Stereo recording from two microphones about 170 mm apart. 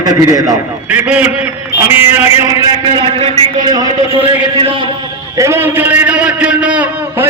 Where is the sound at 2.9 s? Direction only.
30° right (ahead or behind).